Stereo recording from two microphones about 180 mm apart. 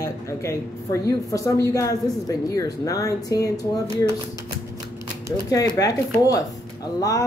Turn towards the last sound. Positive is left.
turn(degrees=20)  # may be behind; listen again after turning